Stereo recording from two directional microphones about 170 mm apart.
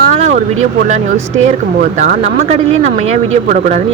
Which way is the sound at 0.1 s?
45° right (ahead or behind).